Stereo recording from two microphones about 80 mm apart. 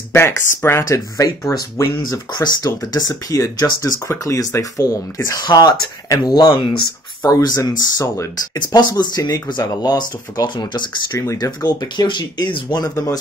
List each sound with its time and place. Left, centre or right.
0.1 s speech: left
5.4 s speech: left
8.5 s speech: left
11.3 s speech: left